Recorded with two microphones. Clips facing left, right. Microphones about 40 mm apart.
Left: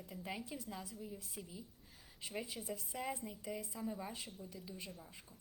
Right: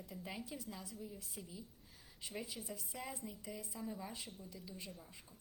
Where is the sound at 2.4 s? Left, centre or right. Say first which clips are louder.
Left 3 dB; left.